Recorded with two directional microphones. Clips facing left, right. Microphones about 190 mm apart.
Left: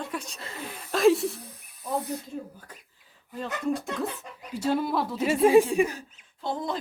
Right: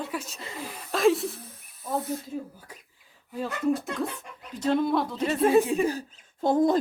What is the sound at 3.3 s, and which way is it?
Speech, 5° right (ahead or behind).